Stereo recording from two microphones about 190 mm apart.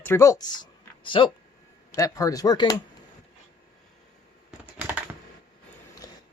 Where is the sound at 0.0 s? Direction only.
10° left (ahead or behind).